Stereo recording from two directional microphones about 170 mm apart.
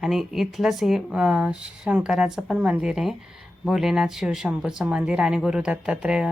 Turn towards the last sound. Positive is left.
turn(degrees=-5)  # may be behind; listen again after turning